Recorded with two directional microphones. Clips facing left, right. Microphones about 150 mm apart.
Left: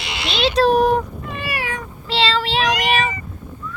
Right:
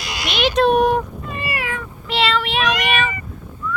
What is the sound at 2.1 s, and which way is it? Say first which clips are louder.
Child singing: even; 30° left (ahead or behind).